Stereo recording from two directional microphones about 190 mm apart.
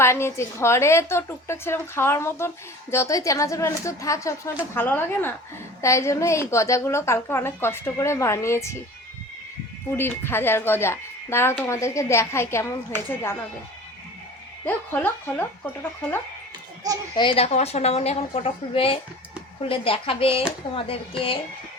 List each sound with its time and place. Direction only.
0.0 s a woman's voice: 15° left (ahead or behind)
9.9 s a woman's voice: 10° left (ahead or behind)
14.6 s a woman's voice: 10° left (ahead or behind)
17.2 s a woman's voice: 30° left (ahead or behind)